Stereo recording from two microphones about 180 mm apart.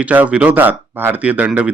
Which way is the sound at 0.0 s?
10° right (ahead or behind).